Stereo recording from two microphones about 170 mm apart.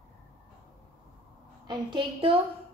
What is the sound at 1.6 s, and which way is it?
Speech, 30° right (ahead or behind).